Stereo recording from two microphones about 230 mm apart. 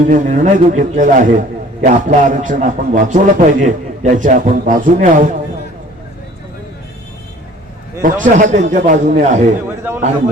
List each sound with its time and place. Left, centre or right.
0.1 s a man's voice: right
8.0 s a man's voice: right
9.6 s a man's voice: centre